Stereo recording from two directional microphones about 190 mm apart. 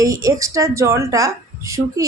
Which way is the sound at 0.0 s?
15° right (ahead or behind).